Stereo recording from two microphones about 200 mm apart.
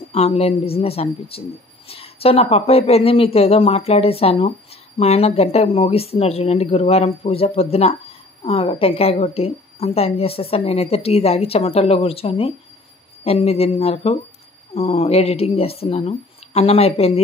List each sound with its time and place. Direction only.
0.1 s a woman's voice: 30° left (ahead or behind)